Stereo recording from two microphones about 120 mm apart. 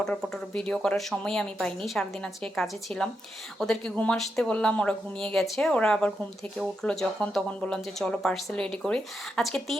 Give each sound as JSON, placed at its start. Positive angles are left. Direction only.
{"t": 0.0, "sound": "speech", "side_deg": 5}